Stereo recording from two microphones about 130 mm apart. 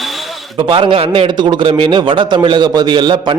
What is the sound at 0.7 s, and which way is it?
A man's voice, 40° right (ahead or behind).